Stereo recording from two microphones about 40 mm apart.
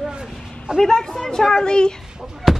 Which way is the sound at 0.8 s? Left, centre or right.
Centre.